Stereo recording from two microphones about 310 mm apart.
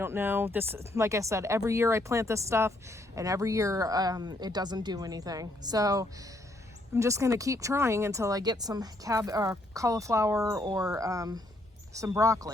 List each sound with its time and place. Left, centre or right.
0.0 s speech: centre